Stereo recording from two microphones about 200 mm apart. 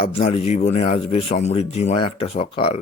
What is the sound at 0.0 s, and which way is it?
Speech, 30° left (ahead or behind).